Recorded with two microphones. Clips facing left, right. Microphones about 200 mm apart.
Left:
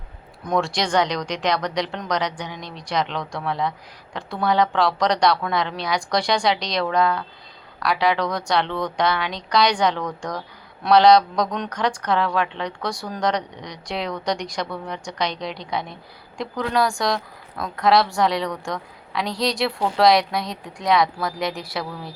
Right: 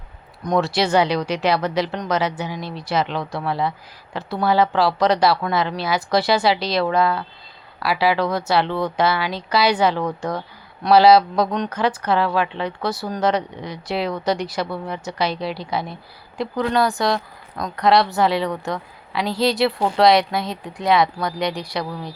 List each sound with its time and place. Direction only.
0.4 s speech: centre (ahead or behind)